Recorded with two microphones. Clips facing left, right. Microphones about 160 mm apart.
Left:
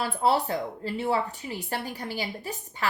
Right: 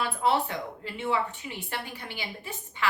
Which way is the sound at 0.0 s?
35° left (ahead or behind).